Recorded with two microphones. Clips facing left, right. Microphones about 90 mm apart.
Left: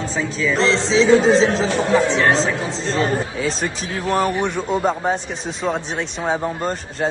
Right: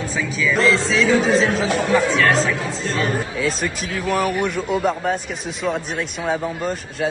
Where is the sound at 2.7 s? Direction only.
50° right (ahead or behind).